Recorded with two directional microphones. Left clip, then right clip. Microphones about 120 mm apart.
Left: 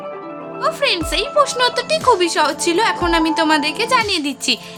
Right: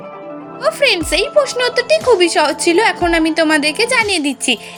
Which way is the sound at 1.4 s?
15° right (ahead or behind).